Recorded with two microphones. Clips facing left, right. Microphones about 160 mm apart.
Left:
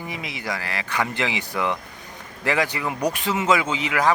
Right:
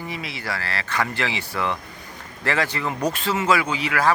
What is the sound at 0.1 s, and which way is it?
Speech, 15° left (ahead or behind).